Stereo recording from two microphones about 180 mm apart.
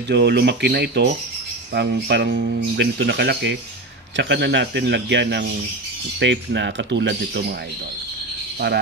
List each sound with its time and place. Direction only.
0.1 s speech: 70° right (ahead or behind)